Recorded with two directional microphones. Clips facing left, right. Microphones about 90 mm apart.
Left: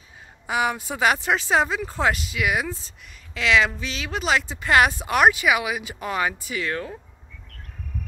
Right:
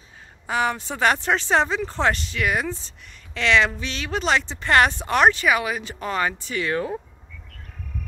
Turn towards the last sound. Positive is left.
turn(degrees=-5)  # may be behind; listen again after turning